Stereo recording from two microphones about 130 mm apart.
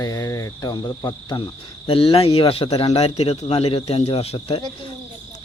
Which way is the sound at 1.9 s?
45° left (ahead or behind).